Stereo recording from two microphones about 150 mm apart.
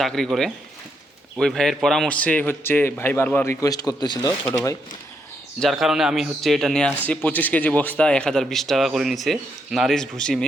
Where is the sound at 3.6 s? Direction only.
25° left (ahead or behind).